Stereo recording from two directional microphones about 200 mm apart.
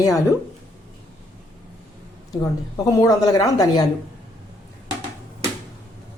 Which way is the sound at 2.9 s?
15° left (ahead or behind).